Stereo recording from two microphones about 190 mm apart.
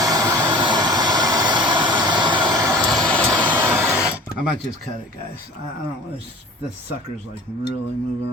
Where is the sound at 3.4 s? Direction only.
10° right (ahead or behind).